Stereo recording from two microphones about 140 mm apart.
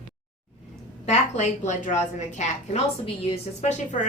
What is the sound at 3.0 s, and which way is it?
Speech, 40° left (ahead or behind).